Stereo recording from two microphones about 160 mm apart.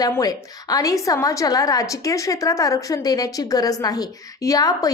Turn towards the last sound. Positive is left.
turn(degrees=25)  # may be behind; listen again after turning